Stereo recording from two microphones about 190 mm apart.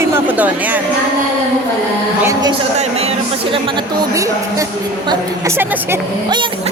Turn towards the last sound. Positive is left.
turn(degrees=-15)  # may be behind; listen again after turning